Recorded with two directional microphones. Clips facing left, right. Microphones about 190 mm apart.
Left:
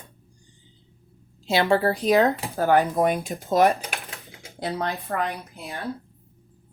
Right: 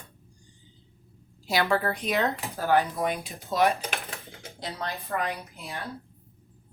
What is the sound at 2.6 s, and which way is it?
Speech, 50° left (ahead or behind).